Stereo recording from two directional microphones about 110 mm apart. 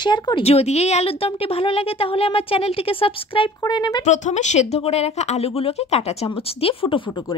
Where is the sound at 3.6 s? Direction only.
40° left (ahead or behind).